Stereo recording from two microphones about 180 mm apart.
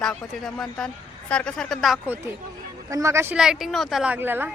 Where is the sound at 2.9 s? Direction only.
15° right (ahead or behind).